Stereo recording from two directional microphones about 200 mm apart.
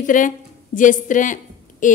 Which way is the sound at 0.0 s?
40° left (ahead or behind).